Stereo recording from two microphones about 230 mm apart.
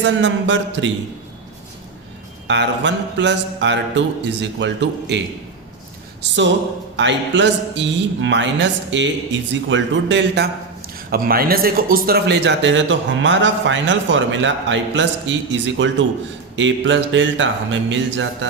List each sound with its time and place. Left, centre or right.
0.0 s a man's voice: right
2.5 s a man's voice: right
6.2 s a man's voice: right
16.6 s mantra: right